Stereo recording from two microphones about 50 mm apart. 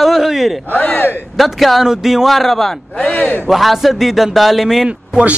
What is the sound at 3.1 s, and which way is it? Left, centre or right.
Speech, left.